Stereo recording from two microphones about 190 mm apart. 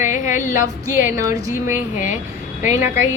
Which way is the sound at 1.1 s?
15° right (ahead or behind).